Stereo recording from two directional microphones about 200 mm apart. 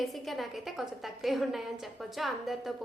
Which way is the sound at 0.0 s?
Centre (ahead or behind).